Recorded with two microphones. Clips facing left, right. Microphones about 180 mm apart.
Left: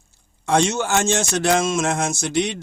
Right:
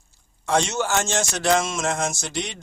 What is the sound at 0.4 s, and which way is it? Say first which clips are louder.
Speech: left 3 dB; 55° left (ahead or behind).